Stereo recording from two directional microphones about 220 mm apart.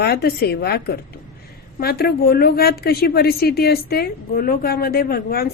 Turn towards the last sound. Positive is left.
turn(degrees=45)  # may be behind; listen again after turning